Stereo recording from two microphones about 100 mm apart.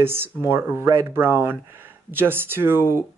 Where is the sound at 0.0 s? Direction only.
25° right (ahead or behind).